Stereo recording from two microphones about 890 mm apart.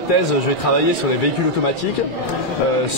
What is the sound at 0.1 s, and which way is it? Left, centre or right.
Speech, left.